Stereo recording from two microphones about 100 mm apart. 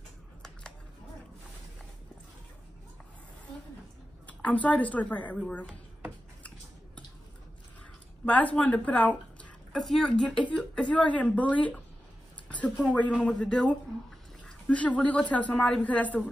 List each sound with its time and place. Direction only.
4.3 s a woman's voice: 15° left (ahead or behind)
8.3 s speech: 15° left (ahead or behind)
9.8 s a woman's voice: centre (ahead or behind)
12.4 s a sound: 15° left (ahead or behind)
13.2 s a woman's voice: 10° left (ahead or behind)